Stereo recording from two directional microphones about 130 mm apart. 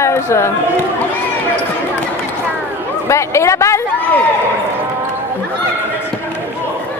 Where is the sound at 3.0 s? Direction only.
20° left (ahead or behind).